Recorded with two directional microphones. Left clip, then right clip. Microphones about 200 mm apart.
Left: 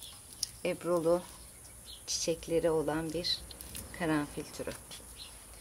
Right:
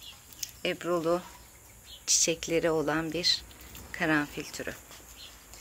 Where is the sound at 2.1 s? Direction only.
5° right (ahead or behind).